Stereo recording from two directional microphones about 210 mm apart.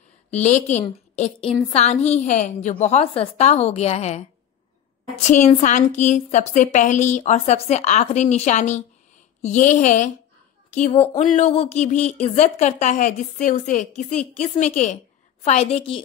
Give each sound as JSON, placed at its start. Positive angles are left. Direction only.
{"t": 0.3, "sound": "a woman's voice", "side_deg": 35}